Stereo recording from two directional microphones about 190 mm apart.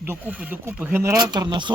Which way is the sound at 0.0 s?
10° right (ahead or behind).